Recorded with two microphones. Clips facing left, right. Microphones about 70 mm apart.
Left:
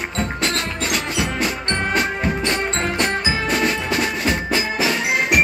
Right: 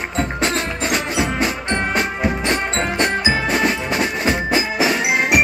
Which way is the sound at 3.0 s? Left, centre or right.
Centre.